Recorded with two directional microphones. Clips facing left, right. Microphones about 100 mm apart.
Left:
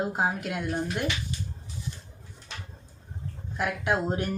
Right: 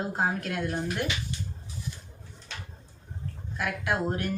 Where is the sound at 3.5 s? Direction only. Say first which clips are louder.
Left 2 dB; 20° left (ahead or behind).